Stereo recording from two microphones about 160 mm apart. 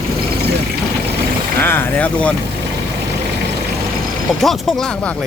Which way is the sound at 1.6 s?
10° left (ahead or behind).